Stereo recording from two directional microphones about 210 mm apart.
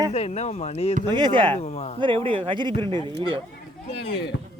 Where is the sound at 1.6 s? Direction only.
30° left (ahead or behind).